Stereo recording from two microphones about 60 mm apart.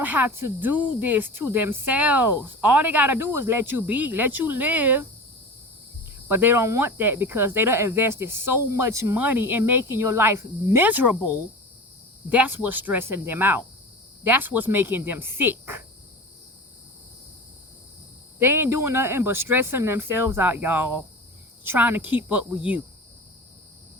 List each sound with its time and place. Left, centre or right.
0.0 s speech: right
0.7 s speech: right
1.9 s speech: right
6.1 s speech: right
9.1 s speech: right
10.8 s speech: right
18.3 s speech: right